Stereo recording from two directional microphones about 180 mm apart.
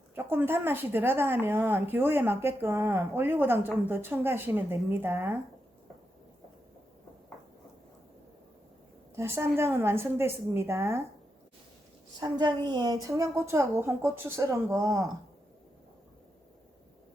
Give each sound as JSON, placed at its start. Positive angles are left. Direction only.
{"t": 0.3, "sound": "a woman's voice", "side_deg": -10}
{"t": 9.1, "sound": "a woman's voice", "side_deg": -15}
{"t": 12.2, "sound": "a woman's voice", "side_deg": -25}